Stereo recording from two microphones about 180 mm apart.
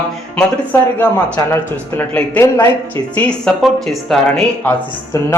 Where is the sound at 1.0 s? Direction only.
10° left (ahead or behind).